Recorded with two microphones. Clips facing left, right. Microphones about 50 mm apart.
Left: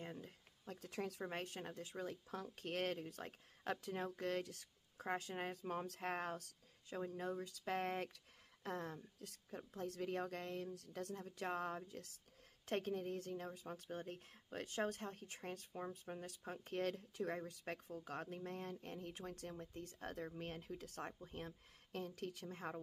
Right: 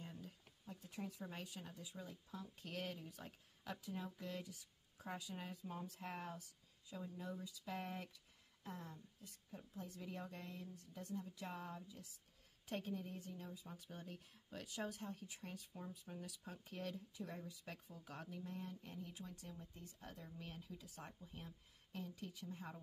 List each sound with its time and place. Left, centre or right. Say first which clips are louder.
0.0 s a sound: left 4 dB; left
0.7 s speech: left 5 dB; left
8.6 s a woman's voice: left 7 dB; left
9.6 s a woman's voice: left 7 dB; left
11.2 s speech: left 7 dB; left
12.6 s speech: left 5 dB; left